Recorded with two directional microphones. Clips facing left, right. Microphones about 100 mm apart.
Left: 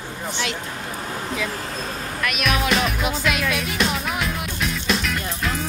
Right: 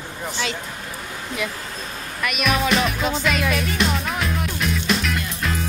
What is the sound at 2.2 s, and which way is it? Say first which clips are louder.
Music: right 2 dB; centre (ahead or behind).